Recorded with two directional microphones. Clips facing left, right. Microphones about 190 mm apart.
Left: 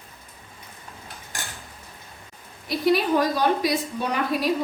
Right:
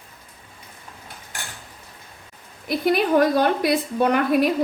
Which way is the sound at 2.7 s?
55° right (ahead or behind).